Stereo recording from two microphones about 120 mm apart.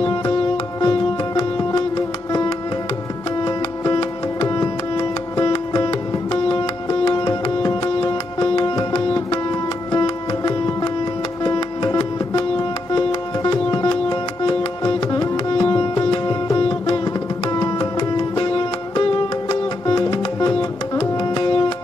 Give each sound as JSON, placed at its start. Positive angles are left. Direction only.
{"t": 0.7, "sound": "music", "side_deg": 35}
{"t": 21.0, "sound": "tabla", "side_deg": 40}